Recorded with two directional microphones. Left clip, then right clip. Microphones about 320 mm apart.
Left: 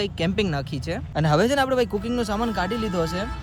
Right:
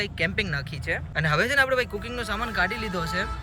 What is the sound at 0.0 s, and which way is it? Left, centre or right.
Speech, centre.